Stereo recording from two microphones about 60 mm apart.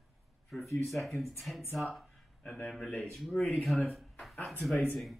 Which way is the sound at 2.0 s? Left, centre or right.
Centre.